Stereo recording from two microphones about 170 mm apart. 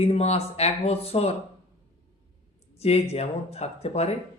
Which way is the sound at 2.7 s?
40° left (ahead or behind).